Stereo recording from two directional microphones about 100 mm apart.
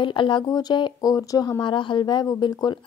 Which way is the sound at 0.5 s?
40° left (ahead or behind).